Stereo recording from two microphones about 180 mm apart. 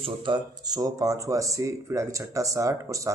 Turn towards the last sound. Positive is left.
turn(degrees=-20)  # may be behind; listen again after turning